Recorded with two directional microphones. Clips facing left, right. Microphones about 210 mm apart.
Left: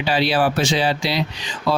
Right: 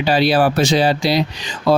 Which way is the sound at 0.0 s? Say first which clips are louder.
Right 4 dB; 40° right (ahead or behind).